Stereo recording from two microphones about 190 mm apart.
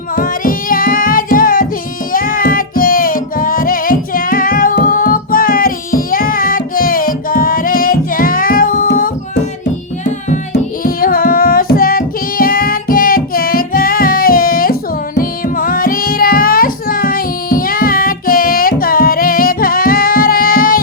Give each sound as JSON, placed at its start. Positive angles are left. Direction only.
{"t": 0.2, "sound": "music", "side_deg": 45}
{"t": 10.5, "sound": "music", "side_deg": 50}